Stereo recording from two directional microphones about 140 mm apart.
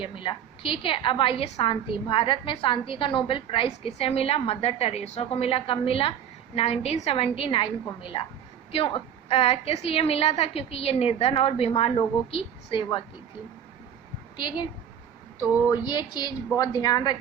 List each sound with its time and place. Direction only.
0.0 s a woman's voice: 35° left (ahead or behind)
14.3 s a woman's voice: 35° left (ahead or behind)
15.7 s a woman's voice: 30° left (ahead or behind)